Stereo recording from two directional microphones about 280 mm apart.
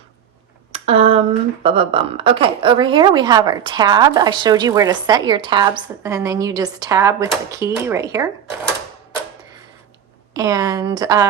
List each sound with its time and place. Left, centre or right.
0.7 s a sound: right
1.6 s a woman's voice: centre
10.3 s a woman's voice: centre